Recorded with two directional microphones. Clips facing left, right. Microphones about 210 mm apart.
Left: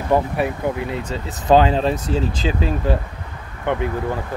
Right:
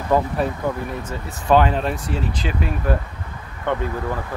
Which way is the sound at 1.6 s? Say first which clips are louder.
Left 3 dB; 30° left (ahead or behind).